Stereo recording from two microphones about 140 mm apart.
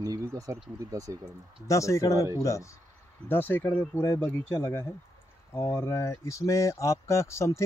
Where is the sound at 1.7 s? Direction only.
20° left (ahead or behind).